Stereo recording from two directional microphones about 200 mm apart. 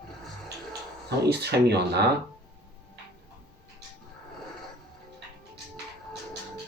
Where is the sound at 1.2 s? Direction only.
55° right (ahead or behind).